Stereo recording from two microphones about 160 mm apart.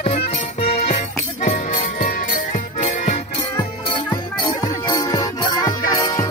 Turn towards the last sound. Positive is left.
turn(degrees=20)  # may be behind; listen again after turning